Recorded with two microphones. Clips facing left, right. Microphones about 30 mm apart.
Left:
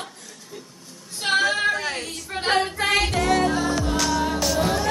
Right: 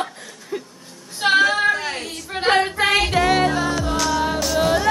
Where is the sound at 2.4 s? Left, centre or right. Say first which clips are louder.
Right 4 dB; centre.